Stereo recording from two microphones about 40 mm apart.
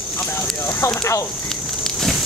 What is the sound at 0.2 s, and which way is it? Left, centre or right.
Speech, left.